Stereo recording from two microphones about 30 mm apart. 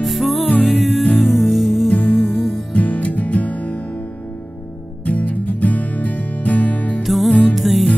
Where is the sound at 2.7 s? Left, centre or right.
Left.